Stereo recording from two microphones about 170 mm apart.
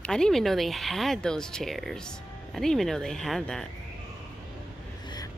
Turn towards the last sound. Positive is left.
turn(degrees=0)  # may be behind; listen again after turning